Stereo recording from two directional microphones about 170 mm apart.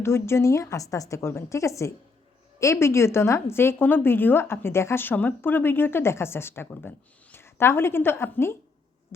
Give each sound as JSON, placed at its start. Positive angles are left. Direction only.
{"t": 0.0, "sound": "a woman's voice", "side_deg": 15}